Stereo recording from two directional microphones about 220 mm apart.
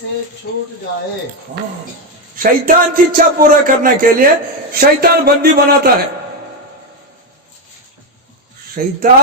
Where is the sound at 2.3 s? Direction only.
40° right (ahead or behind).